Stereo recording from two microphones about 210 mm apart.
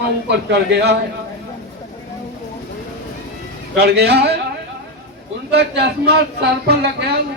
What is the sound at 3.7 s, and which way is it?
Speech, 50° right (ahead or behind).